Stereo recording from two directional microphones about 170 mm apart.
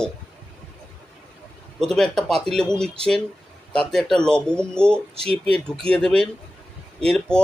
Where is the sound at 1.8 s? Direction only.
5° left (ahead or behind).